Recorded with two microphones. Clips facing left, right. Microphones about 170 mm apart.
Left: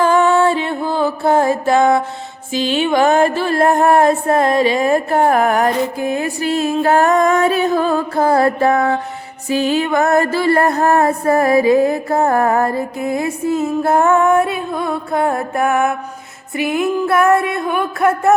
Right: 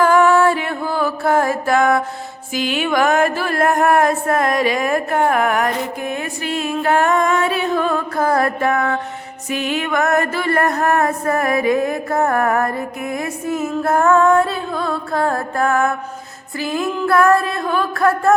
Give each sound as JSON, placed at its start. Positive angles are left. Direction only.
{"t": 0.0, "sound": "music", "side_deg": 25}